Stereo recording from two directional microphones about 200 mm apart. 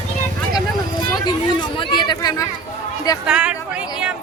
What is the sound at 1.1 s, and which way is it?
Chatter, 20° left (ahead or behind).